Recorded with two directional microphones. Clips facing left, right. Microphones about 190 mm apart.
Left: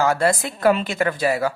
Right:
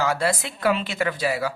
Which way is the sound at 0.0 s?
45° left (ahead or behind).